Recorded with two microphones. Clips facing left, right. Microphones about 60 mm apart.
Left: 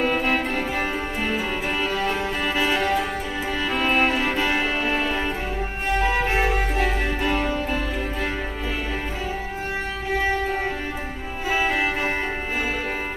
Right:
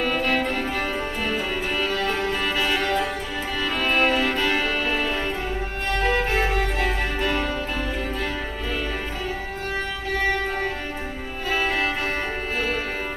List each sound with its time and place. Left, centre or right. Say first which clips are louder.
0.0 s music: left 1 dB; centre
11.4 s music: left 1 dB; centre